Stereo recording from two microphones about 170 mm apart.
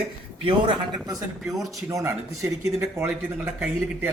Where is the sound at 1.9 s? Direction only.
15° right (ahead or behind).